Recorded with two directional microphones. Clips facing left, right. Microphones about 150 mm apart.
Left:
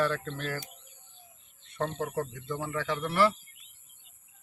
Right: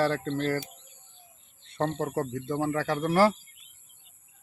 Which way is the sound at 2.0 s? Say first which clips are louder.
Right 3 dB; 40° right (ahead or behind).